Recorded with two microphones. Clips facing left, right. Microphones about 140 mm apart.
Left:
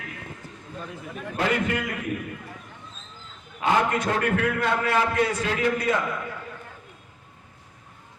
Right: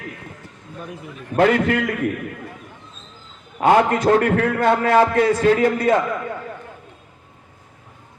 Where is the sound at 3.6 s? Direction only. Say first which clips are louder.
Right 7 dB; 50° right (ahead or behind).